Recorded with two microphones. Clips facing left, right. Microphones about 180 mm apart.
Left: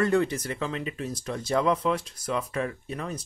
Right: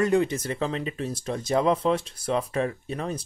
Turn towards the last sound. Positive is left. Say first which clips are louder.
# right 3 dB
turn(degrees=-30)  # may be behind; listen again after turning